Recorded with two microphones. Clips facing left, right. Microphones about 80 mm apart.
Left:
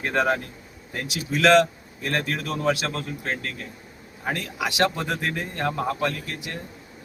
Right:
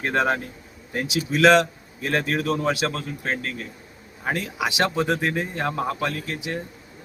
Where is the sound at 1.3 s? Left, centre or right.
Centre.